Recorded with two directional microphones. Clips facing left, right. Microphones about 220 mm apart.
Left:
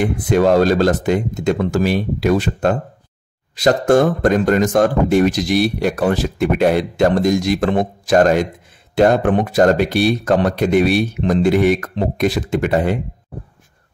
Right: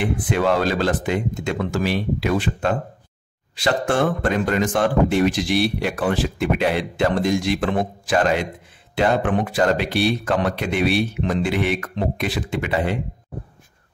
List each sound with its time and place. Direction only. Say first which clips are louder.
0.0 s speech: left 6 dB; 40° left (ahead or behind)